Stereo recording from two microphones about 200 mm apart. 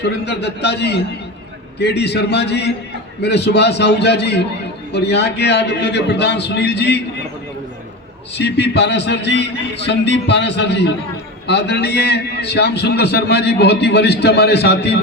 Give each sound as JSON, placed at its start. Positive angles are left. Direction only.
{"t": 0.0, "sound": "a man's voice", "side_deg": 55}
{"t": 8.4, "sound": "a man's voice", "side_deg": 60}